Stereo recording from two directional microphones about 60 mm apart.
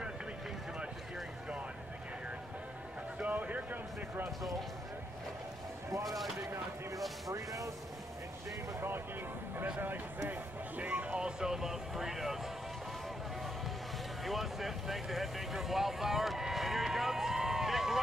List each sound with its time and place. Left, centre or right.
3.2 s a sound: right
6.0 s speech: centre
7.2 s speech: right
10.8 s speech: right; by 12.4 s centre
14.2 s speech: centre